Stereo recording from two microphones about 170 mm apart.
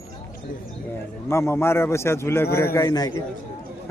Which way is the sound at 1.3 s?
15° left (ahead or behind).